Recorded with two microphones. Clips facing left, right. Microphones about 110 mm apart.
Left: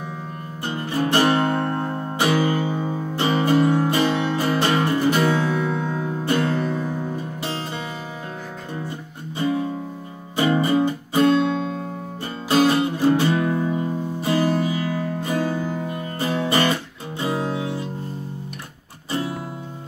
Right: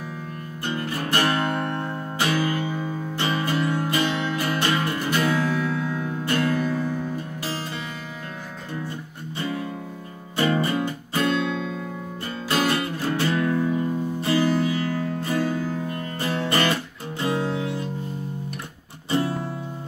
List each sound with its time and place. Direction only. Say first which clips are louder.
0.7 s music: left 4 dB; 25° left (ahead or behind)
10.3 s music: left 4 dB; 20° left (ahead or behind)
14.9 s music: left 1 dB; 10° left (ahead or behind)